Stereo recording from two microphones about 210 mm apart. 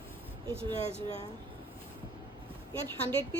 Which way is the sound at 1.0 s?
25° right (ahead or behind).